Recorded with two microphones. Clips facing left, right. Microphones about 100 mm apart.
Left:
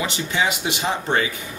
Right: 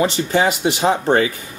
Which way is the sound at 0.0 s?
40° right (ahead or behind).